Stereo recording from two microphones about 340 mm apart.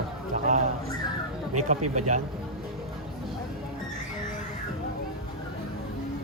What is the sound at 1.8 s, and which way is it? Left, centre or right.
Speech, right.